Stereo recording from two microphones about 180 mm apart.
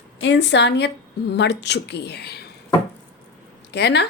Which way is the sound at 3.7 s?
70° left (ahead or behind).